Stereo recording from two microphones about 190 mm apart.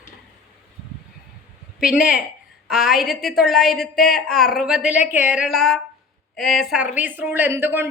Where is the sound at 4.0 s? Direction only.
50° left (ahead or behind).